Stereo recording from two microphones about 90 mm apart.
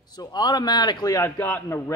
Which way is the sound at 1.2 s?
25° left (ahead or behind).